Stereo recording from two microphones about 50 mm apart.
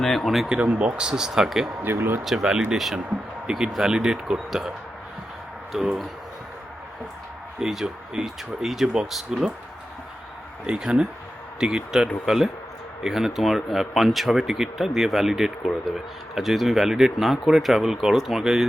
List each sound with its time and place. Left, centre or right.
0.0 s speech: centre
0.4 s speech: centre
1.8 s speech: right
2.2 s speech: centre
5.7 s speech: centre
7.6 s speech: centre
10.7 s speech: centre